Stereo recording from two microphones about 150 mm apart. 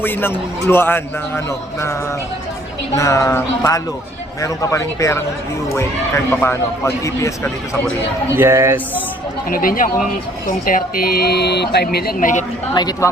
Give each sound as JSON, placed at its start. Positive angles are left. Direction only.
{"t": 0.0, "sound": "a man's voice", "side_deg": 15}
{"t": 6.4, "sound": "a man's voice", "side_deg": 20}
{"t": 8.4, "sound": "speech", "side_deg": -20}
{"t": 9.5, "sound": "speech", "side_deg": 70}
{"t": 12.7, "sound": "a man's voice", "side_deg": 25}